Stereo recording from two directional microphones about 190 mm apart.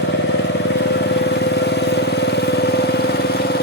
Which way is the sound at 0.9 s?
65° left (ahead or behind).